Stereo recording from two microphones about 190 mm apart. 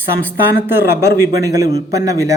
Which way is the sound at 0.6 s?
10° right (ahead or behind).